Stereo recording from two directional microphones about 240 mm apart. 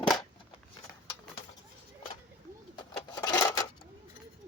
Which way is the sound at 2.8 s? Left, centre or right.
Centre.